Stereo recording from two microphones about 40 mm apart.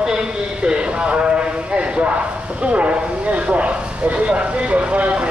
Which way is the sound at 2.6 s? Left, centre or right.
Right.